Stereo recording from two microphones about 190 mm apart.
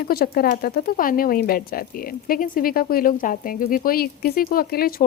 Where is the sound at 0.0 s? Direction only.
55° left (ahead or behind).